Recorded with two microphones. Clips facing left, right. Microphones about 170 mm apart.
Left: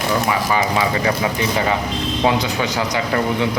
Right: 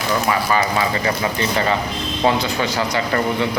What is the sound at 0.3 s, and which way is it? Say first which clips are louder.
Speech: even; 15° left (ahead or behind).